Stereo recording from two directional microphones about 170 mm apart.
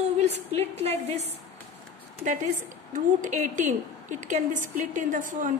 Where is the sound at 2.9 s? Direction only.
50° right (ahead or behind).